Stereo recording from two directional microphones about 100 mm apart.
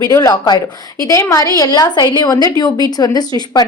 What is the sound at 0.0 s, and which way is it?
A woman's voice, 35° left (ahead or behind).